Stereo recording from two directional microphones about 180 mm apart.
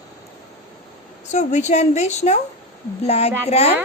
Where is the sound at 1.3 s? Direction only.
40° left (ahead or behind).